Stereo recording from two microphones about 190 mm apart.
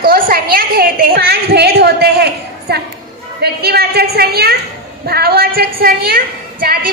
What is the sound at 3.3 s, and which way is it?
A woman's voice, 55° right (ahead or behind).